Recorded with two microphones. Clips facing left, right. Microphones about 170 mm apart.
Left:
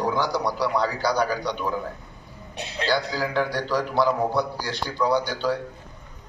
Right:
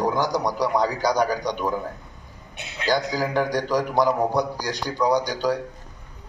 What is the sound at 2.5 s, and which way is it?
Speech, 35° left (ahead or behind).